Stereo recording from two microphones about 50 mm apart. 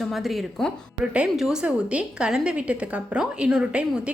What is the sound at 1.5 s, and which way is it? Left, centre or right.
A woman's voice, right.